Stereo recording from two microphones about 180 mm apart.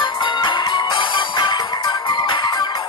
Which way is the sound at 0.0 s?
25° left (ahead or behind).